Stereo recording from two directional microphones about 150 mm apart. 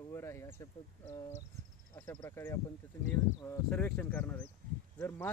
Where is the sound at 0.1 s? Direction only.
20° left (ahead or behind).